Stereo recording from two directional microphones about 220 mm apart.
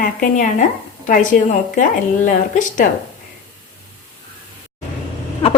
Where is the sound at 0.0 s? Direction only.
35° left (ahead or behind).